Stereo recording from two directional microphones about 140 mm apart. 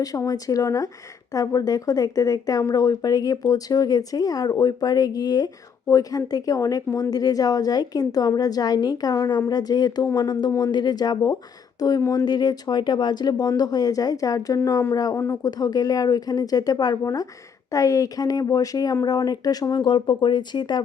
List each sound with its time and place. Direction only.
0.0 s a woman's voice: 25° left (ahead or behind)